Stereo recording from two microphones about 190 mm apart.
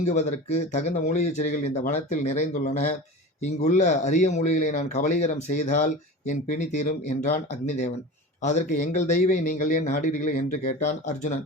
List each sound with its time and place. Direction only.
0.0 s speech: 40° left (ahead or behind)